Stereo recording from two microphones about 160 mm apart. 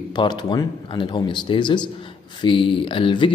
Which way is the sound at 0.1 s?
30° left (ahead or behind).